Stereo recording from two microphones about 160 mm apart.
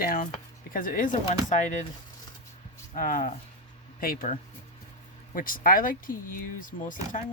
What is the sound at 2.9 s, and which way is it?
Speech, 55° left (ahead or behind).